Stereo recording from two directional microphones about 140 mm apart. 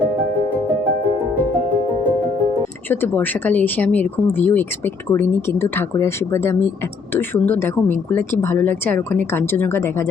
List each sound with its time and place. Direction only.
2.9 s speech: 15° left (ahead or behind)